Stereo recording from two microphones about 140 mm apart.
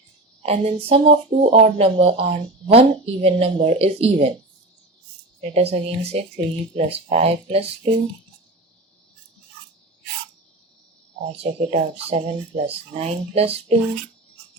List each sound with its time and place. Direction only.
0.4 s speech: 45° right (ahead or behind)
5.4 s speech: 50° right (ahead or behind)
11.2 s speech: 50° right (ahead or behind)